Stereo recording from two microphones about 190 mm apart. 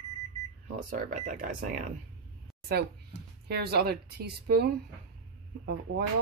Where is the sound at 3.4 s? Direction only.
55° right (ahead or behind).